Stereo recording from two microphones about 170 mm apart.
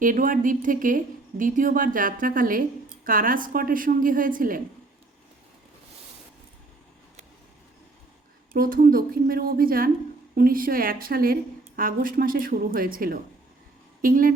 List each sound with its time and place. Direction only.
0.0 s speech: 50° right (ahead or behind)
8.5 s a woman's voice: 55° right (ahead or behind)